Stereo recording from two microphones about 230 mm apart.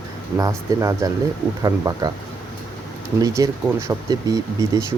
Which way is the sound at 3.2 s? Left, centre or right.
Centre.